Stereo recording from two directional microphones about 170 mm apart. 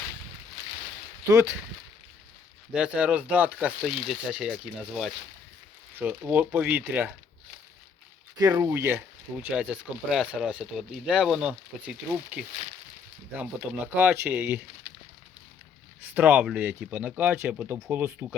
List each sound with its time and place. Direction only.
1.3 s speech: 15° right (ahead or behind)
2.7 s speech: 5° right (ahead or behind)
8.4 s speech: 20° right (ahead or behind)
16.0 s speech: 10° right (ahead or behind)